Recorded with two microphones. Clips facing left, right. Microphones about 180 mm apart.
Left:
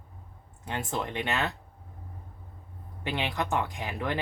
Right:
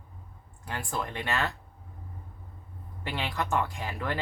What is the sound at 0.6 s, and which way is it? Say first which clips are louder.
Speech: left 2 dB; 20° left (ahead or behind).